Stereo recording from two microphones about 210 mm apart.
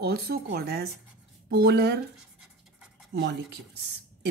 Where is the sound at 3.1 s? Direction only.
50° right (ahead or behind).